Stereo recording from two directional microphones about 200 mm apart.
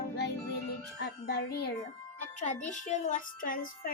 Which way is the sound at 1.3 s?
60° left (ahead or behind).